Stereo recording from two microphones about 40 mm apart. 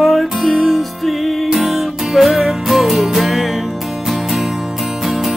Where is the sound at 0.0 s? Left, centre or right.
Centre.